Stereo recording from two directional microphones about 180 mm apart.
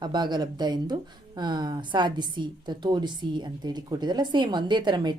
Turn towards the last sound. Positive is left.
turn(degrees=-25)  # may be behind; listen again after turning